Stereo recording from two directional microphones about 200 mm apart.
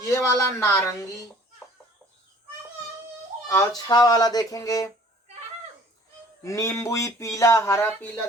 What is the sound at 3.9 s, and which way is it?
Speech, 20° left (ahead or behind).